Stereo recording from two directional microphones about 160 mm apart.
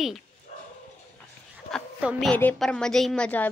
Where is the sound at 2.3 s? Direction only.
10° left (ahead or behind).